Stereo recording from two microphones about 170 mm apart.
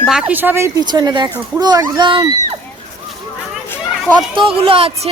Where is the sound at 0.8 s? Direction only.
25° right (ahead or behind).